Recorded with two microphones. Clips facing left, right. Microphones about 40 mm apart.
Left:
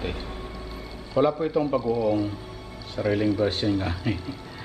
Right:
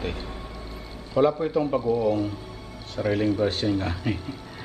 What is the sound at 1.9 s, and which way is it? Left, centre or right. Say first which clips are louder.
Speech: right 1 dB; left.